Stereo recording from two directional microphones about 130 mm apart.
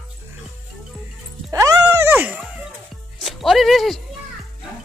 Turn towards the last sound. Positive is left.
turn(degrees=0)  # may be behind; listen again after turning